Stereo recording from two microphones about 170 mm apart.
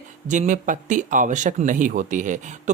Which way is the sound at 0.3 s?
45° right (ahead or behind).